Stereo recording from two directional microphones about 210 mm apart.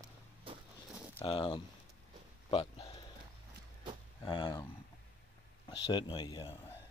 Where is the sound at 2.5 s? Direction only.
25° left (ahead or behind).